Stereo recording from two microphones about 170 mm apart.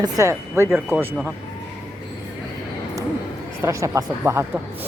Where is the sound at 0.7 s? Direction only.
Centre (ahead or behind).